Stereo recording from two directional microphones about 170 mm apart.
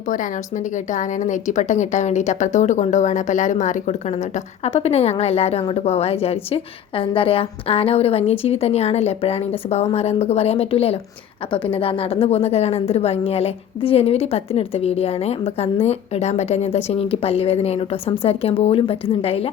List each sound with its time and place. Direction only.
0.1 s a woman's voice: 50° left (ahead or behind)